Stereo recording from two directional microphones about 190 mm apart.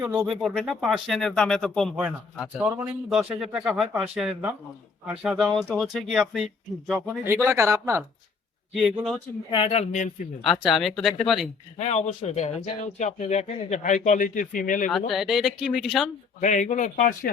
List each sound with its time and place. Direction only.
0.0 s speech: 5° right (ahead or behind)
7.3 s speech: 15° right (ahead or behind)
8.7 s speech: centre (ahead or behind)
9.5 s speech: 30° left (ahead or behind)
10.4 s speech: centre (ahead or behind)
11.8 s speech: 35° left (ahead or behind)
15.1 s speech: centre (ahead or behind)
16.4 s speech: 40° left (ahead or behind)